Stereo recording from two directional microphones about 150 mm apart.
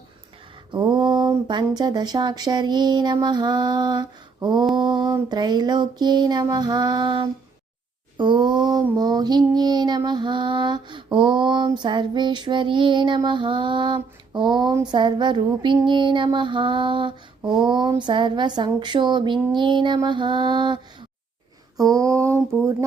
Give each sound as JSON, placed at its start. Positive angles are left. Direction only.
{"t": 0.7, "sound": "mantra", "side_deg": -30}
{"t": 1.5, "sound": "speech", "side_deg": -30}
{"t": 8.2, "sound": "a sound", "side_deg": -30}
{"t": 21.8, "sound": "speech", "side_deg": -25}